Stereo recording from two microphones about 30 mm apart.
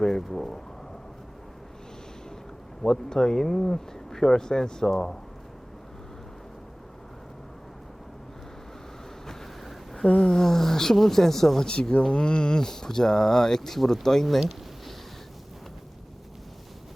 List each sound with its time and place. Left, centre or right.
0.0 s speech: centre
2.8 s speech: centre
9.6 s a sound: centre
10.2 s speech: left
10.4 s speech: centre
11.6 s speech: left
12.6 s speech: centre